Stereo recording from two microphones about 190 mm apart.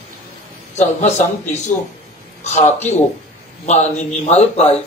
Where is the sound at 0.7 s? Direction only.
40° left (ahead or behind).